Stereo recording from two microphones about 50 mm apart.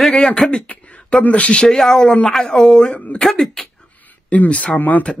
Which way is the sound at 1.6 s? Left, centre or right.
Centre.